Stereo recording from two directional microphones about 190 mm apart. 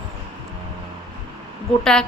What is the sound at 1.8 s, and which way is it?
Speech, 5° left (ahead or behind).